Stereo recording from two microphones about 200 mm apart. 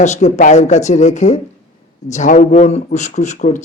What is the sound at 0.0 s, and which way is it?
Speech, 35° left (ahead or behind).